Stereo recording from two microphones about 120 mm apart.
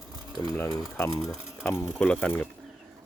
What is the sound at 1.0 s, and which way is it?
Speech, 30° left (ahead or behind).